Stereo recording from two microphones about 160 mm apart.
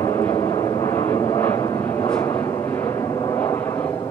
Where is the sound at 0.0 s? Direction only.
15° left (ahead or behind).